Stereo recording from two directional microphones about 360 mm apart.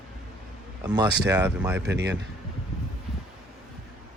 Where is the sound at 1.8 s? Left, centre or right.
Right.